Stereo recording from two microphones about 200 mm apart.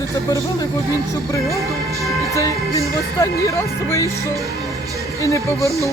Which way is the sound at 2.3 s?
15° left (ahead or behind).